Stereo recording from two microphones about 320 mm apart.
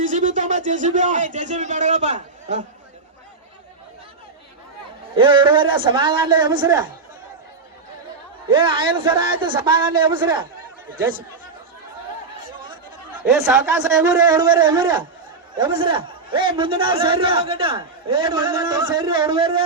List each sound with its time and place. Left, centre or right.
0.0 s speech: right
5.1 s a man's voice: centre
8.4 s a man's voice: centre
13.2 s a man's voice: centre